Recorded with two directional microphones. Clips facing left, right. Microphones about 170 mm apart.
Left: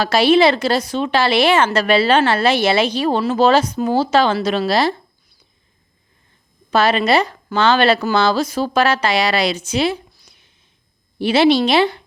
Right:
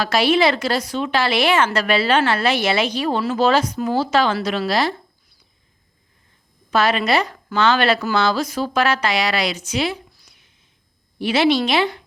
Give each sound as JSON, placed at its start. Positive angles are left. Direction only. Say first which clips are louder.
{"t": 0.0, "sound": "a woman's voice", "louder": "left 4 dB", "side_deg": 30}
{"t": 6.7, "sound": "a woman's voice", "louder": "left 3 dB", "side_deg": 30}